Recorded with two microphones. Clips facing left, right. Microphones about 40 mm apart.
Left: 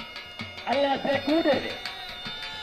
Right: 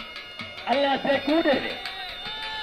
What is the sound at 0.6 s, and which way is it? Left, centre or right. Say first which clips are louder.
Speech: right 2 dB; right.